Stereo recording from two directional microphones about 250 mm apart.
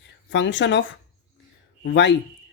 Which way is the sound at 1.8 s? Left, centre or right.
Left.